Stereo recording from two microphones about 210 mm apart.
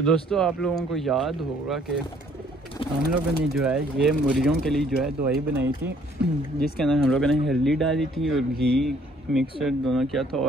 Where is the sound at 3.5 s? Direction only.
5° right (ahead or behind).